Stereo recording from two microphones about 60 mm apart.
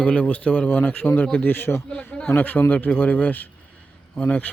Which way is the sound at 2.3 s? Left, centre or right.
Left.